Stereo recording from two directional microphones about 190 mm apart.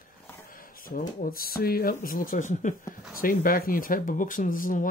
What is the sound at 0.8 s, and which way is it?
Speech, 45° left (ahead or behind).